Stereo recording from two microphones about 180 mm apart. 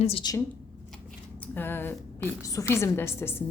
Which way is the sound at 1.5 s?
10° left (ahead or behind).